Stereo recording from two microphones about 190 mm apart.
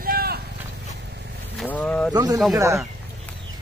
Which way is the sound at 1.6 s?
5° left (ahead or behind).